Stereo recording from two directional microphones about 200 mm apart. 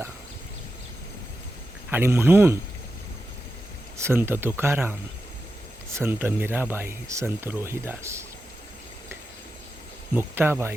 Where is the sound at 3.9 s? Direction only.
10° right (ahead or behind).